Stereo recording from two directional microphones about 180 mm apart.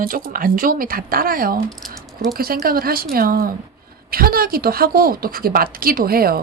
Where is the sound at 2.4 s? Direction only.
55° right (ahead or behind).